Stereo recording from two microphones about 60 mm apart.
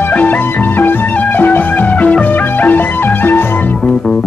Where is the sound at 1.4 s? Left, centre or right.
Left.